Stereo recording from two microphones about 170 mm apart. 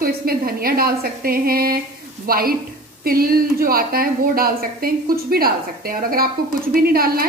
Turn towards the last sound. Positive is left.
turn(degrees=-60)  # may be behind; listen again after turning